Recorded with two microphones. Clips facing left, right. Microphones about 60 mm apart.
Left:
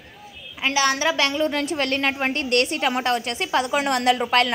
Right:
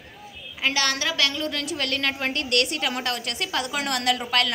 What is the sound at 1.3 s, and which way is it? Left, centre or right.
Speech, centre.